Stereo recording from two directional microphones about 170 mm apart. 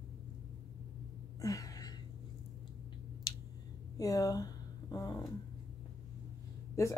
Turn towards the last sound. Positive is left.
turn(degrees=15)  # may be behind; listen again after turning